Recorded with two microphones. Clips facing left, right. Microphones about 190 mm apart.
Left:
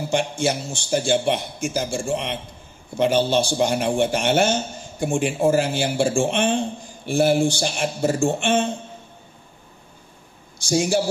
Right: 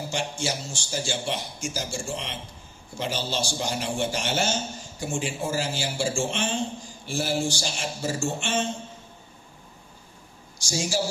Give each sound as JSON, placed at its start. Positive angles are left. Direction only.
{"t": 0.1, "sound": "a man's voice", "side_deg": 60}
{"t": 10.6, "sound": "a man's voice", "side_deg": 55}